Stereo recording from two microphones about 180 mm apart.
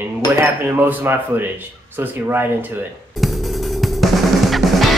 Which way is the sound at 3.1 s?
Centre (ahead or behind).